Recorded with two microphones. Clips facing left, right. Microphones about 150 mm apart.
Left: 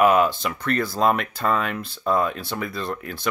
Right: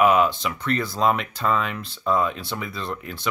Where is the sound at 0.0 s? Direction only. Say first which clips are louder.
Left 1 dB; 45° left (ahead or behind).